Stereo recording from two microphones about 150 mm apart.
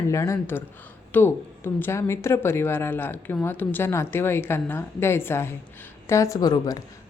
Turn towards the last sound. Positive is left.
turn(degrees=25)  # may be behind; listen again after turning